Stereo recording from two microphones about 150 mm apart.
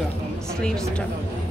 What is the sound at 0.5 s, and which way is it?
Speech, 5° left (ahead or behind).